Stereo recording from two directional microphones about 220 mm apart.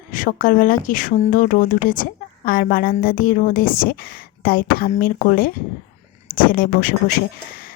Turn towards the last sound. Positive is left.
turn(degrees=40)  # may be behind; listen again after turning